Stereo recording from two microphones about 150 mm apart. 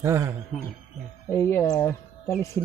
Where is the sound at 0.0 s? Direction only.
20° right (ahead or behind).